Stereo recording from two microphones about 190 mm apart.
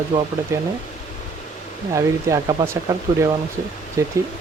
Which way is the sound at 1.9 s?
15° right (ahead or behind).